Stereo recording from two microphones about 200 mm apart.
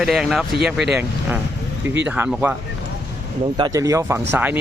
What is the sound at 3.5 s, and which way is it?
Speech, 20° right (ahead or behind).